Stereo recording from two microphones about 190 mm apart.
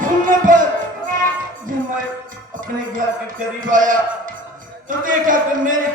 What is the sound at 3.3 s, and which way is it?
A man's voice, 45° right (ahead or behind).